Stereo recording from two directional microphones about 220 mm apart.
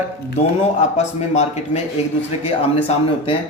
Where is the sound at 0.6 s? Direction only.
30° left (ahead or behind).